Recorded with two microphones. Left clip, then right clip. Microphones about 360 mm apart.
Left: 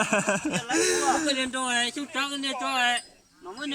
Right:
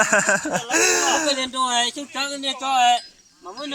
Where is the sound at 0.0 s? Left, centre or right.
Centre.